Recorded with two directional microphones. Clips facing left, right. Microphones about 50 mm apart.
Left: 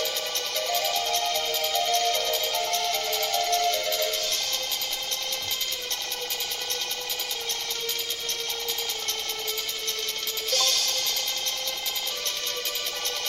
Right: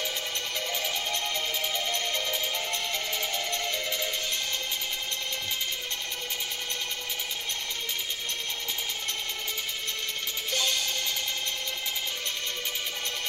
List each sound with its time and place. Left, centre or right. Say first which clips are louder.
0.6 s music: left 7 dB; centre
10.5 s music: left 2 dB; right